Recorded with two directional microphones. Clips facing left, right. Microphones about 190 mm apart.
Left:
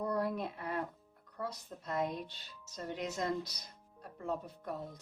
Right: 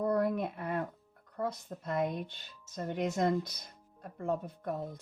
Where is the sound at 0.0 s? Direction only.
50° right (ahead or behind).